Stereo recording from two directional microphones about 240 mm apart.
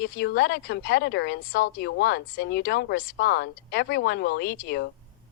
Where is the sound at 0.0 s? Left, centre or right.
Left.